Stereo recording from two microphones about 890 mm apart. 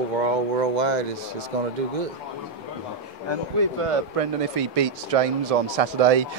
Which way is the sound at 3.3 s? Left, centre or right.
Right.